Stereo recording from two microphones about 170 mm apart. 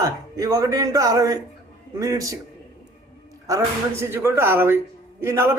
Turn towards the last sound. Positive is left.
turn(degrees=-15)  # may be behind; listen again after turning